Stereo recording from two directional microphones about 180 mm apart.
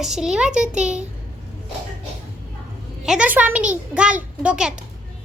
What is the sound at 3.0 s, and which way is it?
A child's voice, 5° right (ahead or behind).